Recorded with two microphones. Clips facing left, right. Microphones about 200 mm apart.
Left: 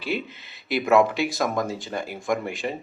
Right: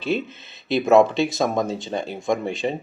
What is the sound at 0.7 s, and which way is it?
Speech, 25° right (ahead or behind).